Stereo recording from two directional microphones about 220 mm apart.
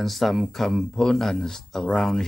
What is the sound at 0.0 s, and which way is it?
Speech, centre (ahead or behind).